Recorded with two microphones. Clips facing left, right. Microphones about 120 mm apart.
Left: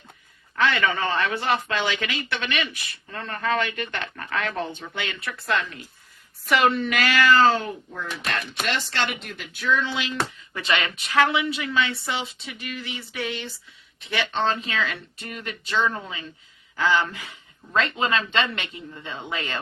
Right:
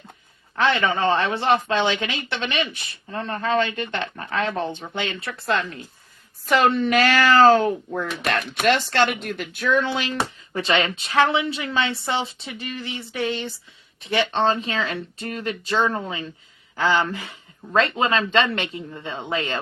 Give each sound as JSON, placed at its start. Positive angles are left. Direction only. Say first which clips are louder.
{"t": 0.6, "sound": "a woman's voice", "louder": "right 3 dB", "side_deg": -25}
{"t": 10.5, "sound": "a woman's voice", "louder": "right 6 dB", "side_deg": -30}